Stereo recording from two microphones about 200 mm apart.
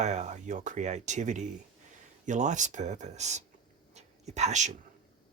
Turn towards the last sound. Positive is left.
turn(degrees=-35)  # may be behind; listen again after turning